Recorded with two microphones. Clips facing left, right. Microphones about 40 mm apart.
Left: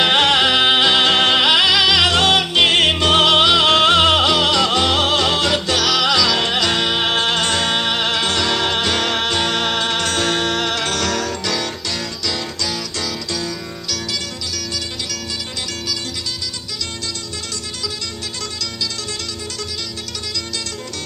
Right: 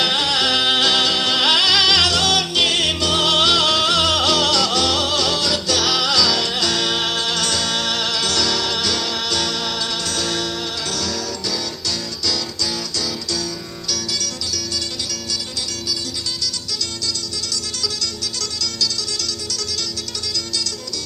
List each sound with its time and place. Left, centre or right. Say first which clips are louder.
0.0 s music: left 5 dB; left
0.4 s music: left 3 dB; left
1.1 s music: left 5 dB; left
1.4 s music: left 2 dB; left
2.0 s music: left 3 dB; left
3.3 s music: left 3 dB; left
3.7 s music: left 5 dB; left
6.0 s music: left 2 dB; left
7.1 s music: left 4 dB; left
13.0 s music: even; left